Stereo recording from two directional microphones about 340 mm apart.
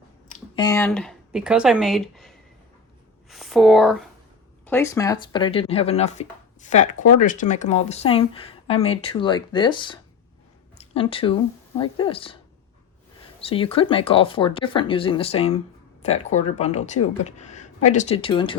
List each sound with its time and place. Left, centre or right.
0.3 s a woman's voice: centre
13.4 s a woman's voice: centre